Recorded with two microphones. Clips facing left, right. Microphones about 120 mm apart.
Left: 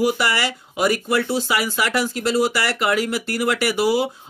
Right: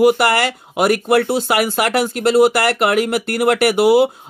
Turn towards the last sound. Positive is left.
turn(degrees=-60)  # may be behind; listen again after turning